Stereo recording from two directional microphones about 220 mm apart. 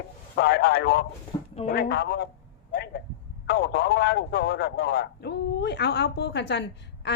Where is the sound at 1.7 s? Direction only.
45° left (ahead or behind).